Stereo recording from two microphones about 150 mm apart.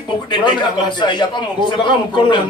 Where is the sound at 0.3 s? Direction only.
30° left (ahead or behind).